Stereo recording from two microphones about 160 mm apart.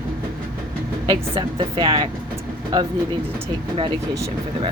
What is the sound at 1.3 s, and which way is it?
Speech, 30° right (ahead or behind).